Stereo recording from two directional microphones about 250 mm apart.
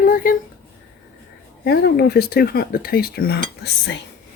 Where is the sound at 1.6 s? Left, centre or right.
Left.